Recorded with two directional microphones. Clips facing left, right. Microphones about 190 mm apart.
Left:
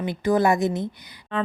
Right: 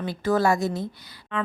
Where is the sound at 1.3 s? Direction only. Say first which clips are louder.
Left 3 dB; 35° left (ahead or behind).